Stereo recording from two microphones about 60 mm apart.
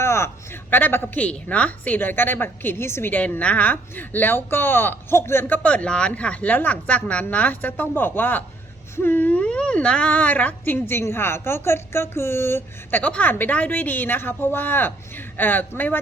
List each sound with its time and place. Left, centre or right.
0.0 s a woman's voice: left
2.0 s a woman's voice: left
3.1 s a woman's voice: left
5.6 s a woman's voice: left
10.8 s a woman's voice: left
13.0 s a woman's voice: left